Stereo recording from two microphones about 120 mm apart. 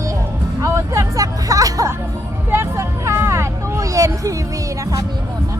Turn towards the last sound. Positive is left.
turn(degrees=-30)  # may be behind; listen again after turning